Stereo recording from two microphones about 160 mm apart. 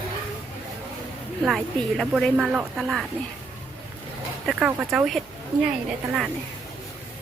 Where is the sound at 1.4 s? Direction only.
Centre (ahead or behind).